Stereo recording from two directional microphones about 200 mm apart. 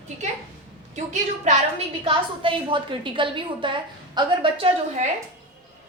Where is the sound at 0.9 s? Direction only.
35° right (ahead or behind).